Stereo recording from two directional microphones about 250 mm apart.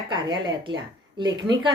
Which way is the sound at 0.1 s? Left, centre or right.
Centre.